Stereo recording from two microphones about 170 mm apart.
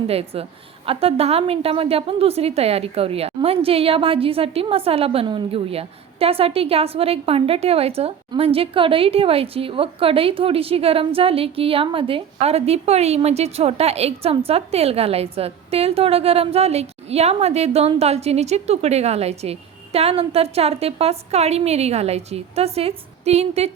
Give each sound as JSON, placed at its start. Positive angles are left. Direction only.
{"t": 0.1, "sound": "a woman's voice", "side_deg": -35}